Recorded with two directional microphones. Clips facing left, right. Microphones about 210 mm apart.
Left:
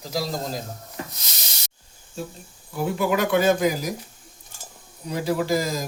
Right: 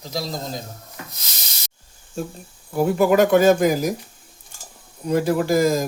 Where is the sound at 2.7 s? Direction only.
45° right (ahead or behind).